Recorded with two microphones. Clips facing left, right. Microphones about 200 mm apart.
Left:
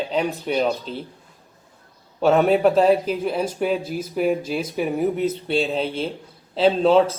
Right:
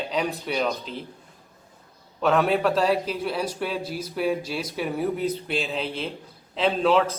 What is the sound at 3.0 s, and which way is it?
Speech, 50° left (ahead or behind).